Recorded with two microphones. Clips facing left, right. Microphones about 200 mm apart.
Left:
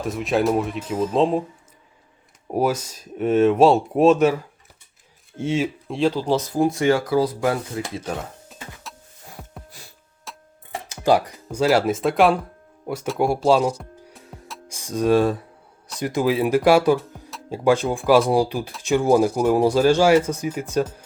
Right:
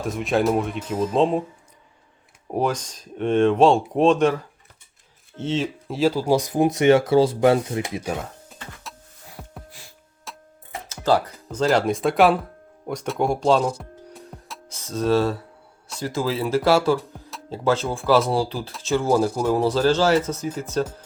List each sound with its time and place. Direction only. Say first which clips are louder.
0.0 s speech: even; centre (ahead or behind)
2.5 s speech: left 2 dB; 5° left (ahead or behind)
5.9 s speech: right 2 dB; 5° right (ahead or behind); by 8.0 s 20° right (ahead or behind)
8.0 s speech: right 1 dB; centre (ahead or behind)
8.9 s music: even; centre (ahead or behind)
10.3 s music: even; centre (ahead or behind)
10.8 s music: left 2 dB; 15° left (ahead or behind)
11.3 s speech: left 2 dB; 5° left (ahead or behind)
13.7 s music: right 2 dB; centre (ahead or behind)
14.7 s speech: left 2 dB; 15° left (ahead or behind)
17.0 s music: even; centre (ahead or behind)
17.5 s speech: left 3 dB; 15° left (ahead or behind)